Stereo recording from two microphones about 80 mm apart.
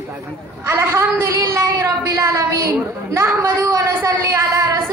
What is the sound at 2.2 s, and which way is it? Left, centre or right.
A woman's voice, right.